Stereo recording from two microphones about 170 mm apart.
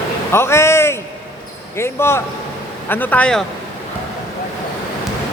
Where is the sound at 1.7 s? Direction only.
15° left (ahead or behind).